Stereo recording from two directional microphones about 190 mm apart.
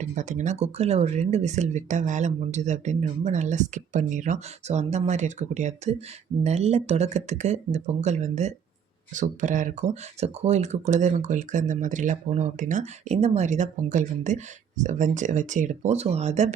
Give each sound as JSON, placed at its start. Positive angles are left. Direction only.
{"t": 0.0, "sound": "speech", "side_deg": -40}